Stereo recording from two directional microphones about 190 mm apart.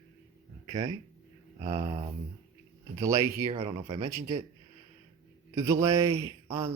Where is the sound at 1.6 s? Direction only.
25° right (ahead or behind).